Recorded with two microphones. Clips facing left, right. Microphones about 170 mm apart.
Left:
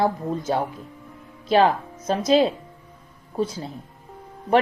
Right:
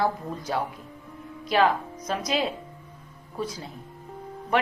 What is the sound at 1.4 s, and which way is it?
A woman's voice, 30° left (ahead or behind).